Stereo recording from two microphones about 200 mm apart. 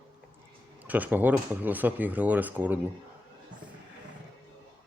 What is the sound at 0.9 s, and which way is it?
Speech, 10° right (ahead or behind).